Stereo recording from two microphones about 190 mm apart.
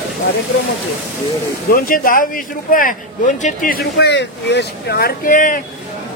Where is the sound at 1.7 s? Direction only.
50° left (ahead or behind).